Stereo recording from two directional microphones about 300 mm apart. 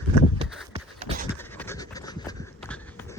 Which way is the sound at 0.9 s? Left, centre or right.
Centre.